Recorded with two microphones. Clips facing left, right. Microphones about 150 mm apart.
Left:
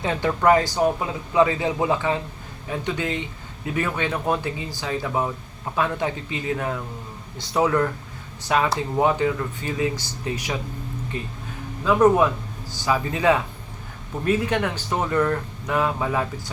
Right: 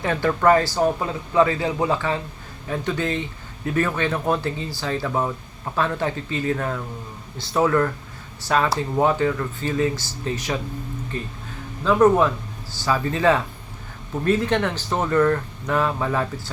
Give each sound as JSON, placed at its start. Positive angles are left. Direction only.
{"t": 0.0, "sound": "a man's voice", "side_deg": 20}